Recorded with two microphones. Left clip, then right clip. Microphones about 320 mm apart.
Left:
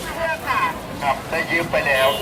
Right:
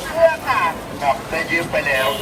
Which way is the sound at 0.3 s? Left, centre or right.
Centre.